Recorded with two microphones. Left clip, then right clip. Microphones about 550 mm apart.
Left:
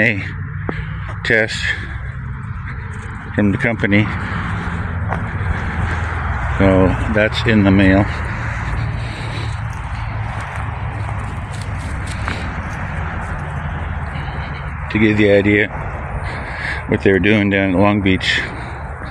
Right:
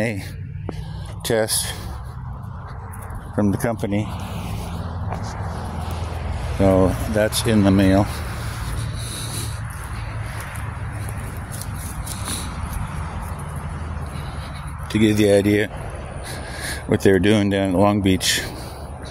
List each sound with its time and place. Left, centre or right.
1.2 s speech: right
3.4 s speech: right
6.6 s speech: right
14.9 s speech: right
16.9 s speech: right